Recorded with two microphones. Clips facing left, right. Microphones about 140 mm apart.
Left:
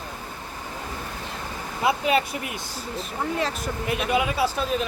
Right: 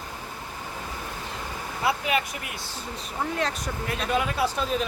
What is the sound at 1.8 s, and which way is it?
Speech, 25° left (ahead or behind).